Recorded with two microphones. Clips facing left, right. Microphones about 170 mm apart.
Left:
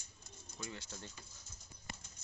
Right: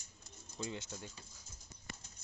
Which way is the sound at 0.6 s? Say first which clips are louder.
Right 5 dB; 20° right (ahead or behind).